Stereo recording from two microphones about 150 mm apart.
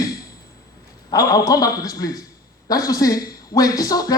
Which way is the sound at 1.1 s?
25° left (ahead or behind).